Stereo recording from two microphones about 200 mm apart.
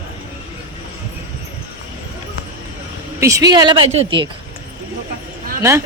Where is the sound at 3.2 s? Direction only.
15° right (ahead or behind).